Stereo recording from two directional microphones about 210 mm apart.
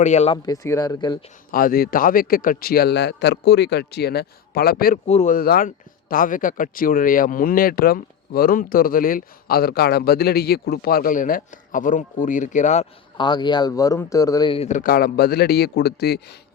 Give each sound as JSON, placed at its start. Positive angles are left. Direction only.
{"t": 0.0, "sound": "speech", "side_deg": 35}
{"t": 0.4, "sound": "speech", "side_deg": 15}
{"t": 1.5, "sound": "a man's voice", "side_deg": 45}
{"t": 5.0, "sound": "speech", "side_deg": 35}